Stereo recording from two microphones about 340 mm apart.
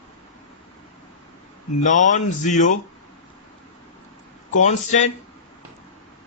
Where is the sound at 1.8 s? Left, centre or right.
Left.